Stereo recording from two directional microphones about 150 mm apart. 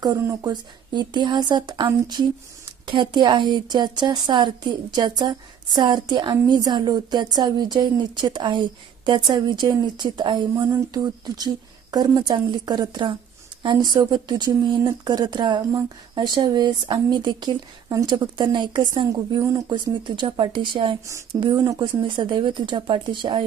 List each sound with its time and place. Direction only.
0.0 s speech: 25° right (ahead or behind)